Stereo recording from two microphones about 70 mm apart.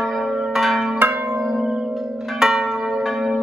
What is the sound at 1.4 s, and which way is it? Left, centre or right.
Church bell, centre.